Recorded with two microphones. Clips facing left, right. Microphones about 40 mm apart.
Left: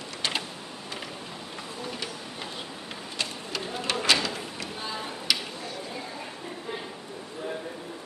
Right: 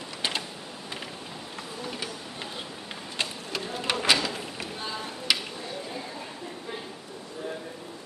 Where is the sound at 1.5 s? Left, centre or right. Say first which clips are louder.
Even; centre.